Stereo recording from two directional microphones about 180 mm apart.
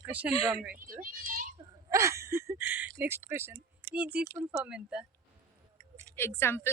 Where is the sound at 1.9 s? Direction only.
15° right (ahead or behind).